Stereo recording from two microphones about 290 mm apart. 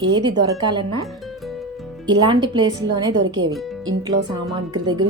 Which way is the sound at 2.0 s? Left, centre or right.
Centre.